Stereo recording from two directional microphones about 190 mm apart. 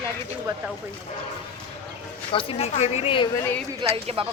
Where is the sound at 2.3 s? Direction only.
30° left (ahead or behind).